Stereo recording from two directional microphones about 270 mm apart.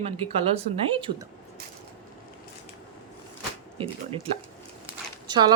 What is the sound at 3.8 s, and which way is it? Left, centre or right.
Speech, right.